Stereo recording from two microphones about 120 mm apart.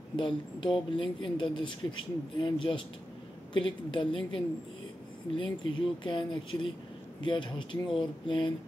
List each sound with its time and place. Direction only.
0.1 s speech: 45° left (ahead or behind)